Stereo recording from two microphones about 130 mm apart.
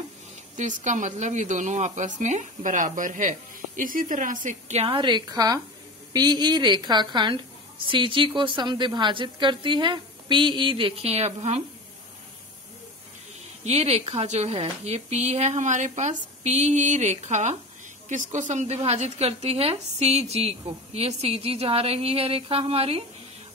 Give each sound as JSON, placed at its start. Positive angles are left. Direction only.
{"t": 0.6, "sound": "a woman's voice", "side_deg": -70}
{"t": 13.7, "sound": "a woman's voice", "side_deg": -55}